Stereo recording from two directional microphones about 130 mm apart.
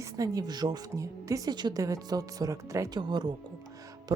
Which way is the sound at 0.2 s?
30° right (ahead or behind).